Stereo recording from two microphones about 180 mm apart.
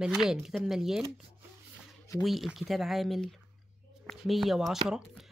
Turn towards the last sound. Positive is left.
turn(degrees=-5)  # may be behind; listen again after turning